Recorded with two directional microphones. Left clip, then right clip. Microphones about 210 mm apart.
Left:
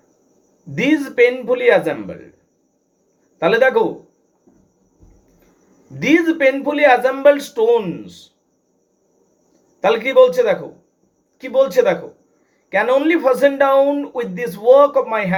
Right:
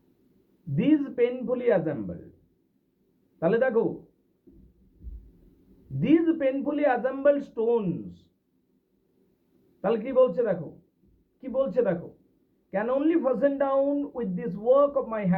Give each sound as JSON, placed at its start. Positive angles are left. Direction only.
{"t": 0.8, "sound": "speech", "side_deg": 0}
{"t": 3.4, "sound": "speech", "side_deg": 5}
{"t": 6.0, "sound": "speech", "side_deg": 0}
{"t": 9.8, "sound": "speech", "side_deg": 0}